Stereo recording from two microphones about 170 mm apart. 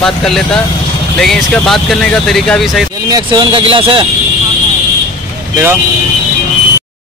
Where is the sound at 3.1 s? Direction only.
25° right (ahead or behind).